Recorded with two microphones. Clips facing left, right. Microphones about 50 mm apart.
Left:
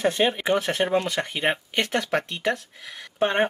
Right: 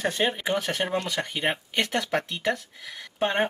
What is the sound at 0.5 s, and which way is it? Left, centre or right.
Speech, centre.